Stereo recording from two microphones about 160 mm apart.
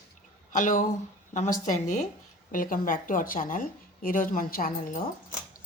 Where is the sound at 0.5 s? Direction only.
55° left (ahead or behind).